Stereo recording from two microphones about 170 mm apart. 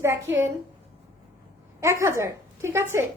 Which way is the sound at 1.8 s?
15° right (ahead or behind).